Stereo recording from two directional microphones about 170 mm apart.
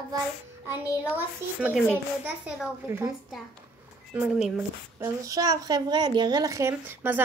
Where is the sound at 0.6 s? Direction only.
10° right (ahead or behind).